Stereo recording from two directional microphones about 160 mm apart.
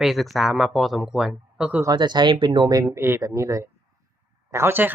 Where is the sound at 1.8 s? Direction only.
25° right (ahead or behind).